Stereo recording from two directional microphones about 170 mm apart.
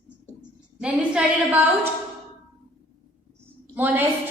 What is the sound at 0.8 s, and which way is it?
Speech, 5° right (ahead or behind).